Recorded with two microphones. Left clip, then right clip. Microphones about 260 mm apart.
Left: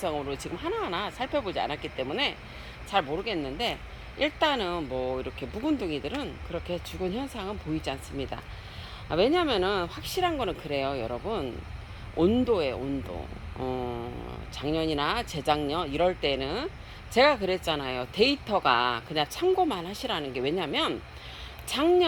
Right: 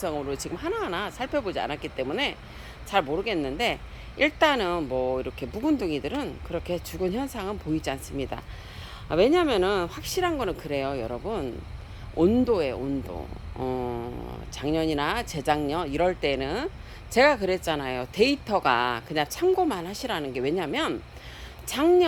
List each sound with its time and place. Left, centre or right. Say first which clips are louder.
0.0 s speech: right 1 dB; centre